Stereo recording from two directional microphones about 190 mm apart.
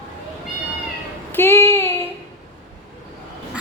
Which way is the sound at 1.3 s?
10° left (ahead or behind).